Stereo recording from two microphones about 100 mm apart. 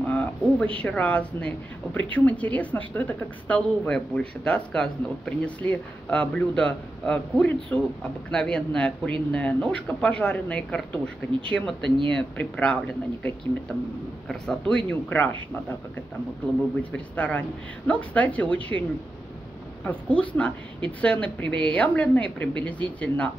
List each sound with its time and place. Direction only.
0.1 s a sound: 15° left (ahead or behind)
0.8 s a woman's voice: 15° left (ahead or behind)
14.3 s a woman's voice: 10° left (ahead or behind)
16.9 s a woman's voice: 15° left (ahead or behind)